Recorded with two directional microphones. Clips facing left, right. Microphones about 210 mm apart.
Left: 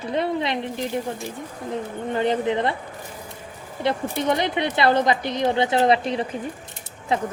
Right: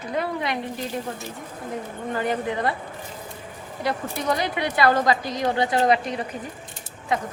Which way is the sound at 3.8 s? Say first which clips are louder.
Left 4 dB; 25° left (ahead or behind).